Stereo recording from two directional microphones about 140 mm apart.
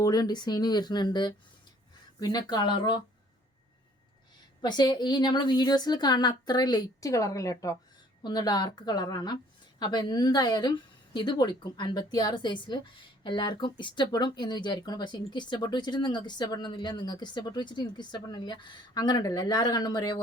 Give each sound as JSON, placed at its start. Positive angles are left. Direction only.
{"t": 0.0, "sound": "speech", "side_deg": 30}
{"t": 4.6, "sound": "a woman's voice", "side_deg": 30}